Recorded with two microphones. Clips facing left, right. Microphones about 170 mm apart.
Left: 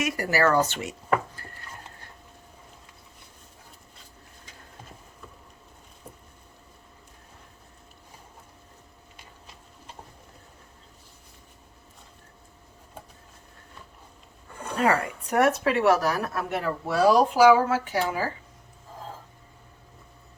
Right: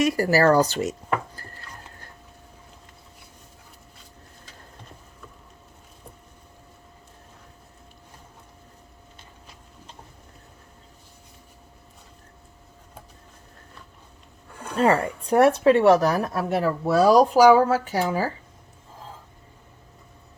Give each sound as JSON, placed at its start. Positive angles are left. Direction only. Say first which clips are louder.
{"t": 0.0, "sound": "speech", "louder": "right 5 dB", "side_deg": -35}
{"t": 1.4, "sound": "a sound", "louder": "right 1 dB", "side_deg": -40}
{"t": 14.8, "sound": "speech", "louder": "right 4 dB", "side_deg": -30}